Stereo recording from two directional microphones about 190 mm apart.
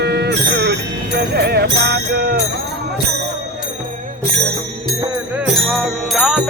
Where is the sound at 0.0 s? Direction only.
60° right (ahead or behind).